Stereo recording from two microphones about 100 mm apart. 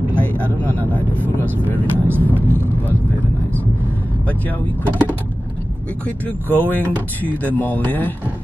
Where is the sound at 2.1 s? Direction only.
15° left (ahead or behind).